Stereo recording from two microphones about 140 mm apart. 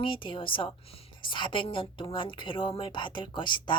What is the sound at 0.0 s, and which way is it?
A woman's voice, 40° left (ahead or behind).